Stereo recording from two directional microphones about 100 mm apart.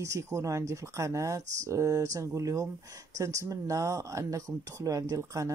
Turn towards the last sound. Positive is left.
turn(degrees=-35)  # may be behind; listen again after turning